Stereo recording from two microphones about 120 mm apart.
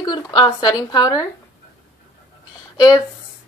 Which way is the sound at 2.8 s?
35° left (ahead or behind).